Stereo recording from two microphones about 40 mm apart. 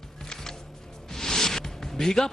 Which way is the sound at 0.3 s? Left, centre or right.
Centre.